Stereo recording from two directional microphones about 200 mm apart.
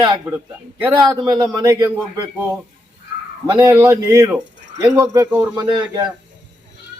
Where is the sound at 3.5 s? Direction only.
15° right (ahead or behind).